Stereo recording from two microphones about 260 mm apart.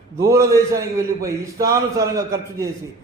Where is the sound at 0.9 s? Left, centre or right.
Centre.